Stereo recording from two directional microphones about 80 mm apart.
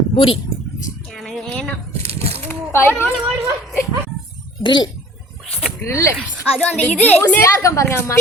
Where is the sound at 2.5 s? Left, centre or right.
Left.